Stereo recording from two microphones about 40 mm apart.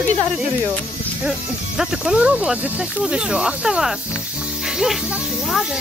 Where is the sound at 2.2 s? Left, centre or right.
Centre.